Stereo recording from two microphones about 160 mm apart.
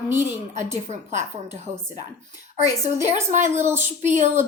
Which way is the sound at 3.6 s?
15° right (ahead or behind).